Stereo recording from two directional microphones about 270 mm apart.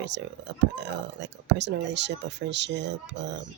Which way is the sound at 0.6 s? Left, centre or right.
Right.